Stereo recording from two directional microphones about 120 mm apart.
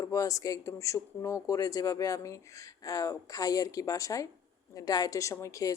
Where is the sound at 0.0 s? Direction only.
30° left (ahead or behind).